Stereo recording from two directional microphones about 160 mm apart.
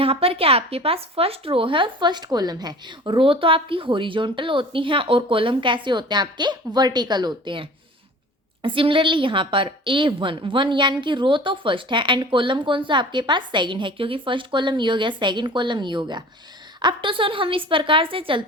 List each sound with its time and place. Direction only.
0.0 s speech: 35° right (ahead or behind)